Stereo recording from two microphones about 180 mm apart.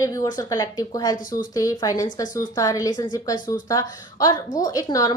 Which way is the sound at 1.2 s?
50° left (ahead or behind).